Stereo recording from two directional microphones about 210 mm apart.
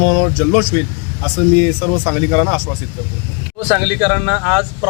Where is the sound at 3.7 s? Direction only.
5° right (ahead or behind).